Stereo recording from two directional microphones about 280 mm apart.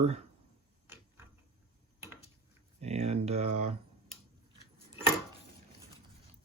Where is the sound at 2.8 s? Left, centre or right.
Right.